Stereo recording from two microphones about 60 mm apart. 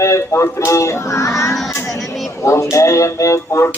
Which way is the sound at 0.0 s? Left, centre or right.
Left.